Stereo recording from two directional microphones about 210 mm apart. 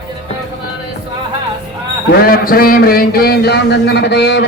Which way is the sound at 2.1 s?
45° left (ahead or behind).